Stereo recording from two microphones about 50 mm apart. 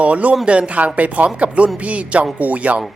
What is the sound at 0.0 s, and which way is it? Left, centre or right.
Speech, right.